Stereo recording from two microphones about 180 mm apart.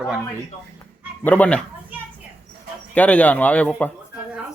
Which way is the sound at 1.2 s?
10° left (ahead or behind).